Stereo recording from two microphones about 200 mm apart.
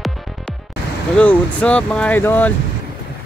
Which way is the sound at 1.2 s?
5° left (ahead or behind).